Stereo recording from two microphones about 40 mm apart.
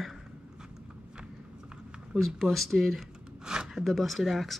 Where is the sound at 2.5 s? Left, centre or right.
Centre.